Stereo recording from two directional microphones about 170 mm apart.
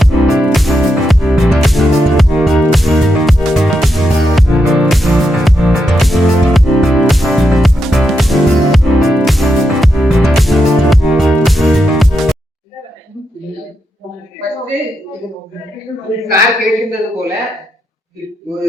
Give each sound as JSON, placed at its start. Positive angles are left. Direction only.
{"t": 0.0, "sound": "music", "side_deg": 0}
{"t": 16.1, "sound": "speech", "side_deg": 0}
{"t": 17.2, "sound": "speech", "side_deg": -20}